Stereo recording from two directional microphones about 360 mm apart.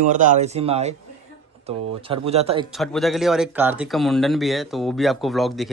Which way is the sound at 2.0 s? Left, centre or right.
Centre.